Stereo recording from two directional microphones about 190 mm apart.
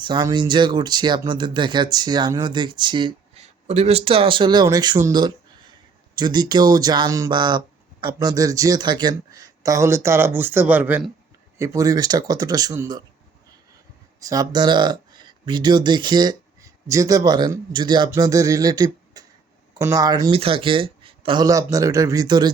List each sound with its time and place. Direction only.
0.0 s speech: 20° right (ahead or behind)
14.2 s speech: 20° right (ahead or behind)